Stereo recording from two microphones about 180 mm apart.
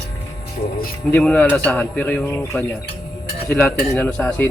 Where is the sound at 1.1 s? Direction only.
5° left (ahead or behind).